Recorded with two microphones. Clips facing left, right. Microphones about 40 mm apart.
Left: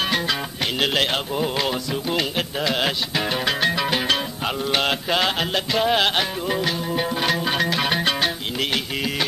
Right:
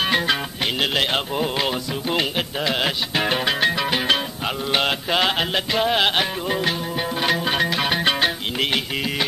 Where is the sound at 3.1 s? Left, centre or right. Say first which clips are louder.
Right 5 dB; right.